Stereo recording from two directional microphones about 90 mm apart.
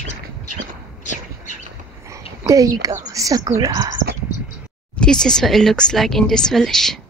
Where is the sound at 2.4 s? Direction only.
40° right (ahead or behind).